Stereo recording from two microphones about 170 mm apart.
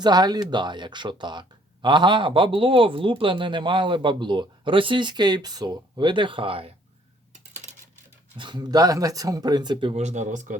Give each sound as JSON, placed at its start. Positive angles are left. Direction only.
{"t": 0.0, "sound": "speech", "side_deg": -25}
{"t": 7.5, "sound": "a sound", "side_deg": -45}
{"t": 8.4, "sound": "speech", "side_deg": -25}
{"t": 9.9, "sound": "speech", "side_deg": -45}